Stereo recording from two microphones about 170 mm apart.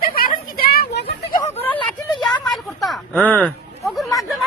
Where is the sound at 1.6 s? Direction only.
10° left (ahead or behind).